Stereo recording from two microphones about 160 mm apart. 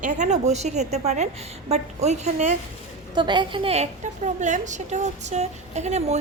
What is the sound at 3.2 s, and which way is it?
A woman's voice, 30° right (ahead or behind).